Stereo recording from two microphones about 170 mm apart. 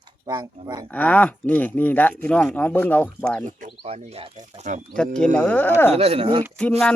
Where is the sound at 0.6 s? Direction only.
25° right (ahead or behind).